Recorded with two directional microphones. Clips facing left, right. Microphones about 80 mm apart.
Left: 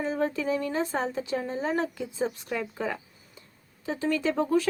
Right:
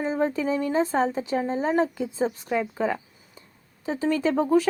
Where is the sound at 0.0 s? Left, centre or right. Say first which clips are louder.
Right 3 dB; right.